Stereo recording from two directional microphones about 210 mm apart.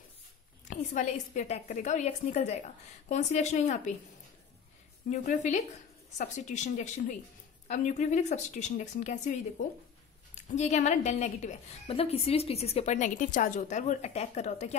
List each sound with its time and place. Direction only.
0.7 s a woman's voice: 35° left (ahead or behind)
5.1 s a woman's voice: 35° left (ahead or behind)